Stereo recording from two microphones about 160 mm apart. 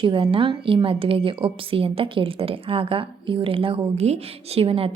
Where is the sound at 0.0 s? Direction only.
30° right (ahead or behind).